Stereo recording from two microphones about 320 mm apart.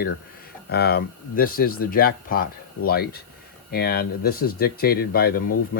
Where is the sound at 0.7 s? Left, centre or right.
Left.